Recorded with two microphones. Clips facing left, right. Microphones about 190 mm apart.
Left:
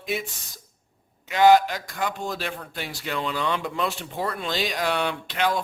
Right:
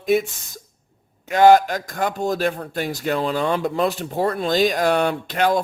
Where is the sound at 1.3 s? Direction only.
45° right (ahead or behind).